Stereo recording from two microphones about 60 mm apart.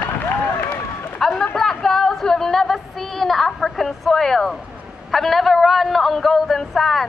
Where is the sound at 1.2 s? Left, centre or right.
Centre.